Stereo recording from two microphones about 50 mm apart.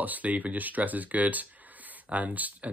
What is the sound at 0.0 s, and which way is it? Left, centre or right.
Speech, right.